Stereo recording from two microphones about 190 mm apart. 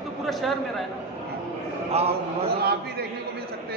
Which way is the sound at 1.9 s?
35° right (ahead or behind).